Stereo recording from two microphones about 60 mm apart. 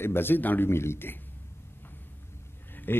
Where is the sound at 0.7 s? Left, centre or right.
Left.